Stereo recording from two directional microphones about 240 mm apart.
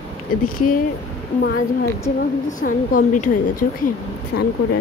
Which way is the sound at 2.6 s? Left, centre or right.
Left.